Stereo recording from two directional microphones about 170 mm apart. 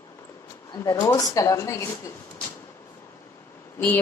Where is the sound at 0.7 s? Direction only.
25° left (ahead or behind).